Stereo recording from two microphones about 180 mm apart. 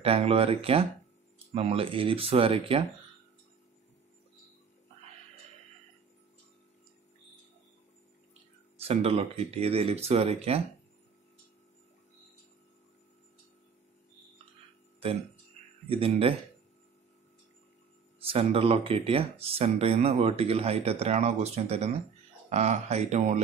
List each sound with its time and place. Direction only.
0.0 s speech: 30° right (ahead or behind)
8.8 s speech: 35° right (ahead or behind)
15.9 s speech: 30° right (ahead or behind)
18.2 s speech: 30° right (ahead or behind)